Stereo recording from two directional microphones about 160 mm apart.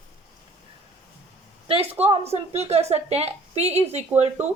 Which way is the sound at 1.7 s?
40° right (ahead or behind).